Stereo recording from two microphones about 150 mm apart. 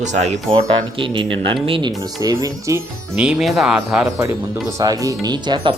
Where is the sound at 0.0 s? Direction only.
50° right (ahead or behind).